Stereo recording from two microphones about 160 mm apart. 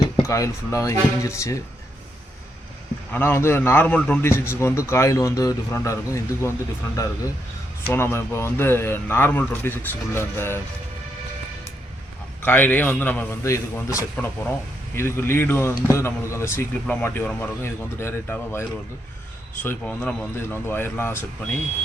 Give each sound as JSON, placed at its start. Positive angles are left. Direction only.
{"t": 0.2, "sound": "speech", "side_deg": 20}
{"t": 3.1, "sound": "a man's voice", "side_deg": 15}
{"t": 12.5, "sound": "a man's voice", "side_deg": 10}
{"t": 19.6, "sound": "a man's voice", "side_deg": 10}